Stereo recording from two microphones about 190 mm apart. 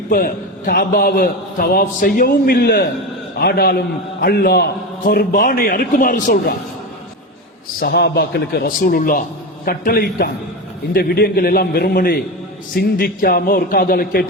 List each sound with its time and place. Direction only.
0.1 s a man's voice: 50° left (ahead or behind)
7.8 s a man's voice: 55° left (ahead or behind)